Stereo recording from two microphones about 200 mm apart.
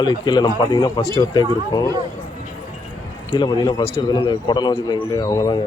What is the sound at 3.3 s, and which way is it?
A man's voice, 20° left (ahead or behind).